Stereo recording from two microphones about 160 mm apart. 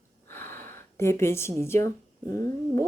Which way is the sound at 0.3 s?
15° left (ahead or behind).